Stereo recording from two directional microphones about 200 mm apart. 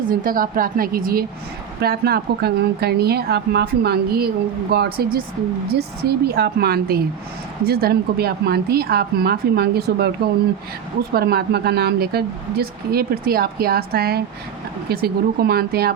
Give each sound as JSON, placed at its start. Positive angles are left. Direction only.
{"t": 0.1, "sound": "speech", "side_deg": -45}
{"t": 11.1, "sound": "speech", "side_deg": -50}